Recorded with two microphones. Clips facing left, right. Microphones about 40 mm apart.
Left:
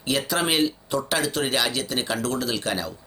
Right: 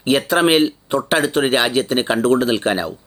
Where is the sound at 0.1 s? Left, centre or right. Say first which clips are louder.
Right 9 dB; right.